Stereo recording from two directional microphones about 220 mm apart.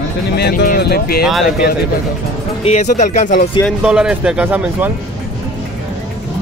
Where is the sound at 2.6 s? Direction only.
30° left (ahead or behind).